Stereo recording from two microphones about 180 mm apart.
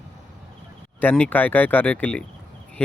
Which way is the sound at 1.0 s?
10° left (ahead or behind).